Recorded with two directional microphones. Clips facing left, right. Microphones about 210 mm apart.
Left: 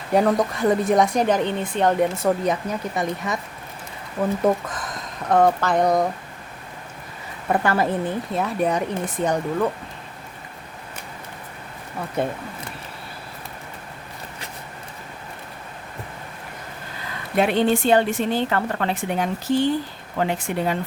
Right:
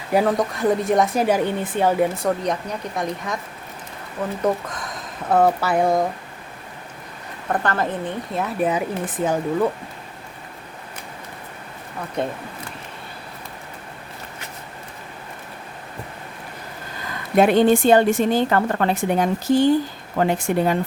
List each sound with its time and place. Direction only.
0.1 s speech: centre (ahead or behind)
4.4 s speech: centre (ahead or behind)
7.5 s speech: 10° left (ahead or behind)
12.2 s speech: 5° left (ahead or behind)
17.3 s a woman's voice: 45° right (ahead or behind)